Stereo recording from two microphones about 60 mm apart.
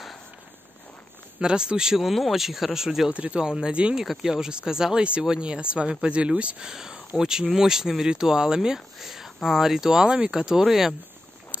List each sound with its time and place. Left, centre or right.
1.4 s speech: centre
3.1 s speech: right; by 11.0 s centre